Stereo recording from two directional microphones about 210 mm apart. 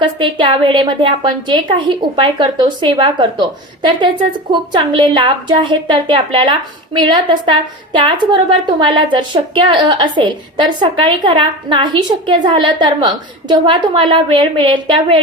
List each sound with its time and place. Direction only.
0.0 s a woman's voice: 20° right (ahead or behind)